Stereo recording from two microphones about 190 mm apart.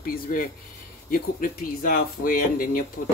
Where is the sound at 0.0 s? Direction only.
45° left (ahead or behind).